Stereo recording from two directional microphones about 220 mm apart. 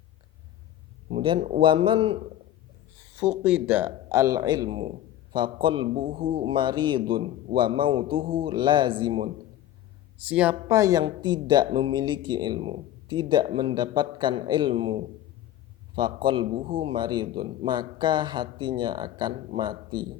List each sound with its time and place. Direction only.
1.1 s speech: 25° right (ahead or behind)
3.2 s speech: 5° right (ahead or behind); by 9.2 s 20° right (ahead or behind)
10.2 s speech: 5° right (ahead or behind)